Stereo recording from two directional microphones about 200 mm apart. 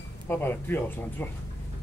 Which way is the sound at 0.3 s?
10° left (ahead or behind).